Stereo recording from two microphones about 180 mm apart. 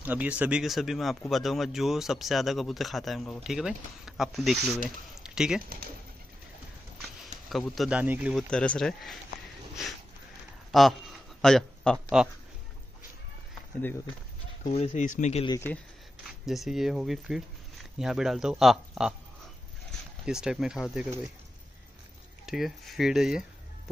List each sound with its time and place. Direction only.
0.0 s speech: 10° right (ahead or behind)
7.4 s speech: centre (ahead or behind)
8.5 s speech: 5° left (ahead or behind)
10.7 s speech: centre (ahead or behind)
14.6 s speech: 35° left (ahead or behind)
15.4 s speech: 20° left (ahead or behind)
16.4 s speech: centre (ahead or behind)
20.2 s speech: 5° right (ahead or behind)
22.5 s speech: centre (ahead or behind)